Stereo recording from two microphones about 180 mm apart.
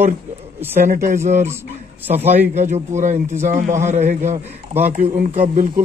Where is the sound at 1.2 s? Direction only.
40° right (ahead or behind).